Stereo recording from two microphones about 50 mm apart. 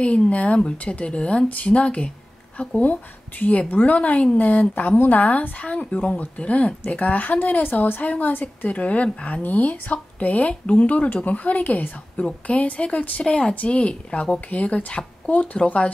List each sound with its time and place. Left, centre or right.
0.0 s a woman's voice: left
13.2 s a woman's voice: centre